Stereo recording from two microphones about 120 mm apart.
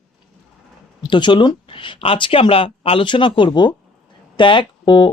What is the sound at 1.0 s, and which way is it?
Speech, 40° left (ahead or behind).